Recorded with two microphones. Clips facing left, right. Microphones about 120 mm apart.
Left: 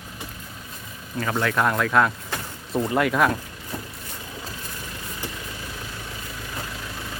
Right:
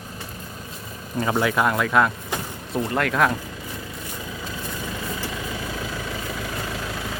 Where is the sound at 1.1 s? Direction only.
20° right (ahead or behind); by 3.3 s 5° left (ahead or behind).